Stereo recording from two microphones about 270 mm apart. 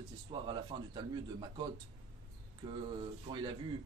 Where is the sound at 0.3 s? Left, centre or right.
Centre.